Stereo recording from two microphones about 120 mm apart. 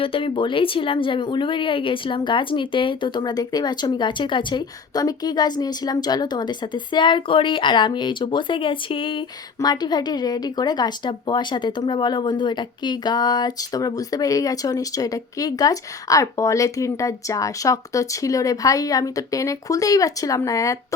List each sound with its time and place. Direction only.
0.0 s a woman's voice: 45° left (ahead or behind)
9.6 s a woman's voice: 35° left (ahead or behind)